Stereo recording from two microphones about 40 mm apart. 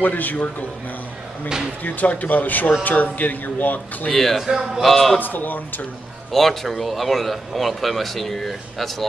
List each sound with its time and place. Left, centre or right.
0.0 s speech: left
1.8 s speech: left
4.1 s speech: centre
4.4 s a man's voice: centre
4.8 s speech: centre
5.2 s speech: left
6.3 s speech: centre